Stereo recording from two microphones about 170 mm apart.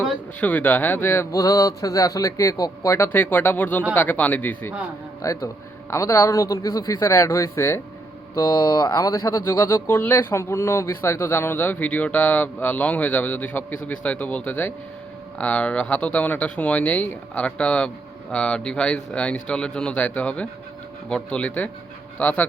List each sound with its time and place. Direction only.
0.3 s speech: 10° left (ahead or behind)